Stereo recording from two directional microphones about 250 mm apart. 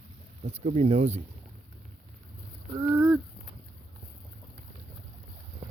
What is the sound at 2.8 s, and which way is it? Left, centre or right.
Speech, centre.